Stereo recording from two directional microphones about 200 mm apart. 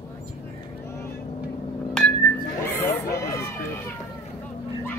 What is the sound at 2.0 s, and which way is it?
Music, 5° left (ahead or behind).